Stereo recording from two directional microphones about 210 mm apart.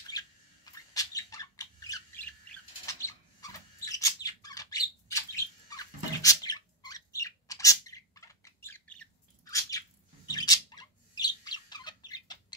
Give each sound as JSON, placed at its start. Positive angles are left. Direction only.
{"t": 0.1, "sound": "a sound", "side_deg": 15}
{"t": 0.9, "sound": "squawk", "side_deg": 15}
{"t": 2.9, "sound": "bird", "side_deg": 15}